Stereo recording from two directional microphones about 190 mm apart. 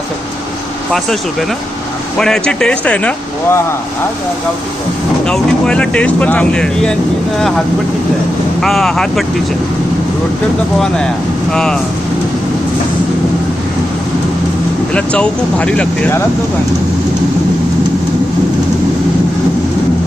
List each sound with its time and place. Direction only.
2.1 s speech: 5° left (ahead or behind)
5.2 s speech: 5° left (ahead or behind)
8.6 s speech: centre (ahead or behind)
10.8 s speech: 5° left (ahead or behind)
14.9 s speech: 5° left (ahead or behind)